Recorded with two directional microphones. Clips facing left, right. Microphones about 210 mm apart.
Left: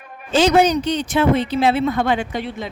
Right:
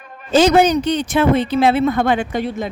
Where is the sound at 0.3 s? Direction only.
50° right (ahead or behind).